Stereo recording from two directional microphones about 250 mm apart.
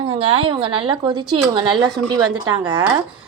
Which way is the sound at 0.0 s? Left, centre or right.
Right.